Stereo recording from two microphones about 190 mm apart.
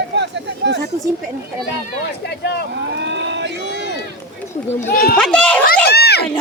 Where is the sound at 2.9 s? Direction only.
70° right (ahead or behind).